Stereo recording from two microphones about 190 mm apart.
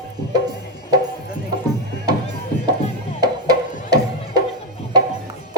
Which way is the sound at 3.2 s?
20° right (ahead or behind).